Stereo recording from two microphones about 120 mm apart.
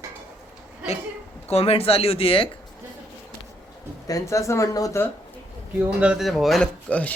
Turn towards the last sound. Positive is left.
turn(degrees=10)  # may be behind; listen again after turning